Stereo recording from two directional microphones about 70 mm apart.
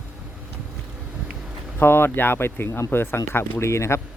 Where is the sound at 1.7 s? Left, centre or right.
Left.